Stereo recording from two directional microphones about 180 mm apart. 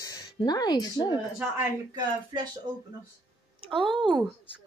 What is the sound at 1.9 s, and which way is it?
Speech, 25° right (ahead or behind).